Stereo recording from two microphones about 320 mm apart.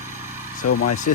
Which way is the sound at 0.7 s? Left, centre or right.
Left.